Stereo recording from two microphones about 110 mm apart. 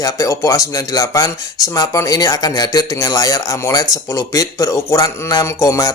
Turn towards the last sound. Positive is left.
turn(degrees=30)  # may be behind; listen again after turning